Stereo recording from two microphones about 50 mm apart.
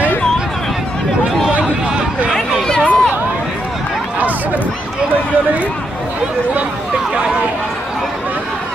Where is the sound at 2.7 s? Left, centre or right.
Left.